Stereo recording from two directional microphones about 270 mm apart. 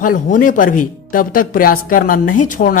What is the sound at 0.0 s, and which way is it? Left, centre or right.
Speech, left.